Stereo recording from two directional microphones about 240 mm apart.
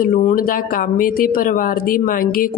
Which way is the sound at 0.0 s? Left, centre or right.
Left.